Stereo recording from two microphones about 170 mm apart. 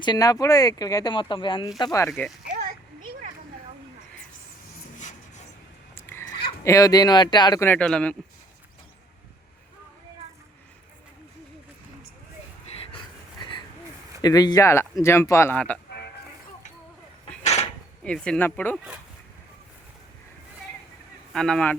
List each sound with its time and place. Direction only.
0.0 s speech: 25° left (ahead or behind)
2.0 s speech: centre (ahead or behind)
5.9 s cat: 15° left (ahead or behind)
6.3 s speech: 20° left (ahead or behind)
7.7 s speech: 5° left (ahead or behind)
13.4 s a sound: 25° left (ahead or behind)
14.2 s speech: 25° left (ahead or behind); by 15.8 s 10° left (ahead or behind)
17.4 s a sound: 40° left (ahead or behind)
18.0 s speech: 5° left (ahead or behind)
21.3 s speech: 5° left (ahead or behind)